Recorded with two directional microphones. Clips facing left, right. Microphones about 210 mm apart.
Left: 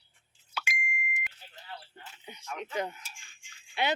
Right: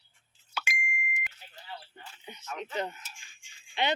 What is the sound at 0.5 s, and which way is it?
Plop, 45° right (ahead or behind).